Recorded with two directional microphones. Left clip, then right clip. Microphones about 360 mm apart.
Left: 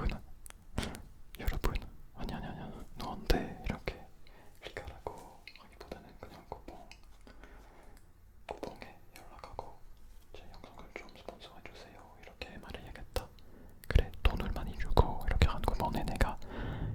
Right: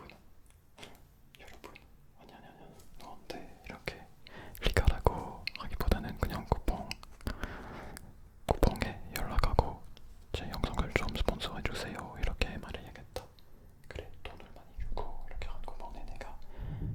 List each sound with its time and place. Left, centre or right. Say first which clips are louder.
0.9 s a sound: left 8 dB; left
4.6 s whispering: right 12 dB; right
8.6 s whispering: right 12 dB; right
12.6 s whispering: right 3 dB; centre
13.2 s a sound: left 3 dB; centre
13.8 s whispering: left 9 dB; left